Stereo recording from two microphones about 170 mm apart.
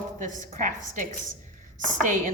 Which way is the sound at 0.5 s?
50° right (ahead or behind).